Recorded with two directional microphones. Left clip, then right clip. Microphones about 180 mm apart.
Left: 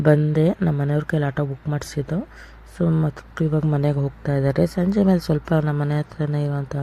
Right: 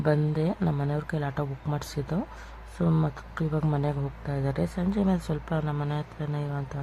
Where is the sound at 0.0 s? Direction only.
25° left (ahead or behind).